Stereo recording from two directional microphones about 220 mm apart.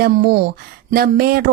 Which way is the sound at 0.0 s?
45° right (ahead or behind).